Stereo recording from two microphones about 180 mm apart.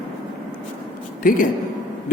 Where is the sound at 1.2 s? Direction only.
50° left (ahead or behind).